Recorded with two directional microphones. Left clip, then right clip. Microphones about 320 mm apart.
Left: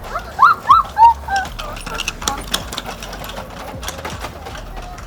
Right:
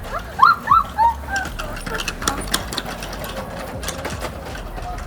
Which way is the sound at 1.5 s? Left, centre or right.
Centre.